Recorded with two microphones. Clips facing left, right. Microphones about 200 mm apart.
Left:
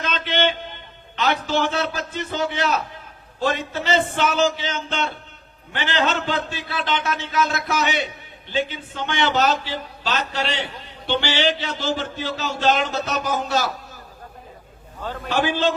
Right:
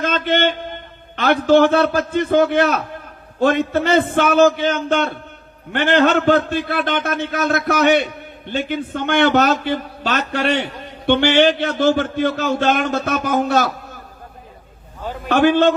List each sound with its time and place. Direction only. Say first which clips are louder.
0.0 s a man's voice: right 5 dB; 50° right (ahead or behind)
15.0 s a man's voice: right 2 dB; 10° right (ahead or behind)
15.3 s a man's voice: right 8 dB; 55° right (ahead or behind)